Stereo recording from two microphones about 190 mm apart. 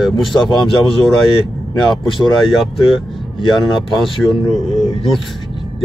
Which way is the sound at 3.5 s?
25° left (ahead or behind).